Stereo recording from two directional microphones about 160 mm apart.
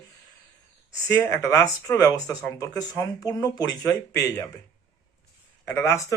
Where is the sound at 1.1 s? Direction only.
20° left (ahead or behind).